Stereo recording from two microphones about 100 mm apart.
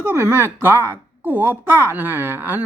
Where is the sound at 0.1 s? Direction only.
20° right (ahead or behind).